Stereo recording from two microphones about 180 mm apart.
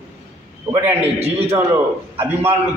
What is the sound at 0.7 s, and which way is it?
Speech, 20° right (ahead or behind).